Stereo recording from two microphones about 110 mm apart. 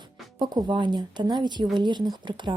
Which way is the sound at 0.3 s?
45° right (ahead or behind).